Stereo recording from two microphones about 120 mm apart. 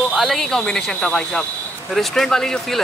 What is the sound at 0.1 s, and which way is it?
Speech, centre (ahead or behind).